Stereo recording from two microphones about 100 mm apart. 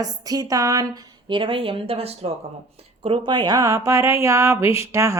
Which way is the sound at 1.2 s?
60° right (ahead or behind).